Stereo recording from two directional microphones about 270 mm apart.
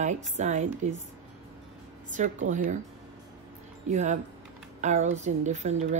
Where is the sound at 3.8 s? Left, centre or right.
Right.